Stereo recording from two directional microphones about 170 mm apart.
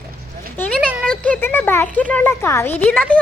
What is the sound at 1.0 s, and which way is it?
Speech, 5° left (ahead or behind).